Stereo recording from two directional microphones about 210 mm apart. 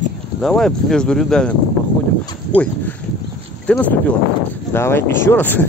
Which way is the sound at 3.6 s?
5° left (ahead or behind).